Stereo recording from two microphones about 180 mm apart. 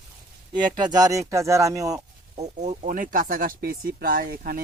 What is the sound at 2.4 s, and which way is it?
Speech, 40° right (ahead or behind).